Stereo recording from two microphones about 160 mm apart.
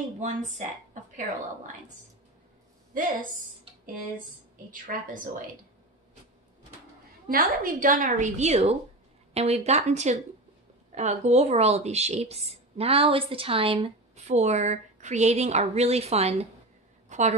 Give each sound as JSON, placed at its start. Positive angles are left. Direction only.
{"t": 0.2, "sound": "speech", "side_deg": -50}
{"t": 4.6, "sound": "a woman's voice", "side_deg": -55}
{"t": 7.2, "sound": "a woman's voice", "side_deg": -60}
{"t": 17.1, "sound": "a sound", "side_deg": -50}